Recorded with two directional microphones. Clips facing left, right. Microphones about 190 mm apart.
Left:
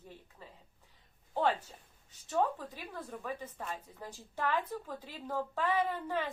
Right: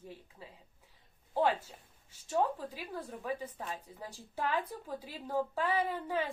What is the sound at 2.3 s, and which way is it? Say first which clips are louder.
A woman's voice: even; 10° right (ahead or behind).